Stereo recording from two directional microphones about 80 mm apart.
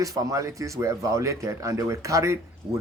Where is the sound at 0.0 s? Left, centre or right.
Right.